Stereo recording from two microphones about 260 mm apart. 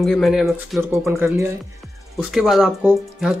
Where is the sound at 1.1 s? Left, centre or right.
Centre.